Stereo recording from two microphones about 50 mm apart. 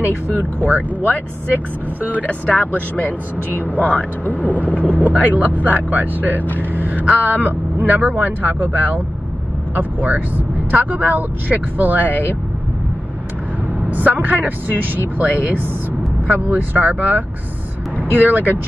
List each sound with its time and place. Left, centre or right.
0.0 s speech: right
0.8 s speech: left
1.5 s speech: right
2.1 s speech: left
3.4 s speech: right
3.8 s speech: left
4.8 s speech: right
6.7 s vehicle: right
7.2 s speech: right
13.7 s speech: right